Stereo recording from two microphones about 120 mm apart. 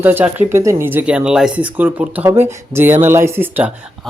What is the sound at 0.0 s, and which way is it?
Speech, 15° right (ahead or behind).